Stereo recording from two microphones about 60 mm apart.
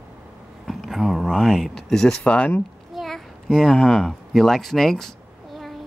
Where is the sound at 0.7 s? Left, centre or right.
Centre.